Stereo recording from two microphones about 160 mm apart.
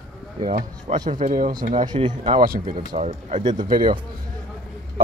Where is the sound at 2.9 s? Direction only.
45° right (ahead or behind).